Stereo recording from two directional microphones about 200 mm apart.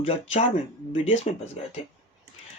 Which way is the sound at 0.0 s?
35° left (ahead or behind).